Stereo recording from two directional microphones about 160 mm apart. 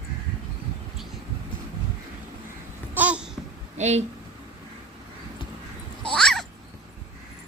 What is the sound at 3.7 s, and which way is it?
Speech, 45° right (ahead or behind).